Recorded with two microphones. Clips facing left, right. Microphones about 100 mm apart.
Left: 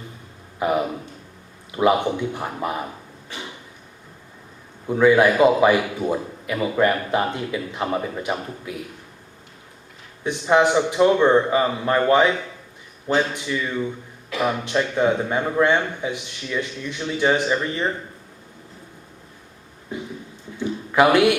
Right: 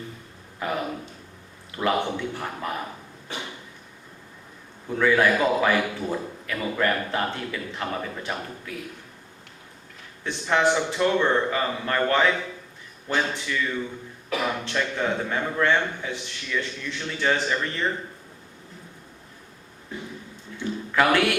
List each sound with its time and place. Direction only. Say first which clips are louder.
0.6 s speech: left 7 dB; 15° left (ahead or behind)
4.9 s speech: left 5 dB; 20° left (ahead or behind)
10.2 s a man's voice: left 5 dB; 15° left (ahead or behind)
20.6 s a sound: left 5 dB; 20° left (ahead or behind)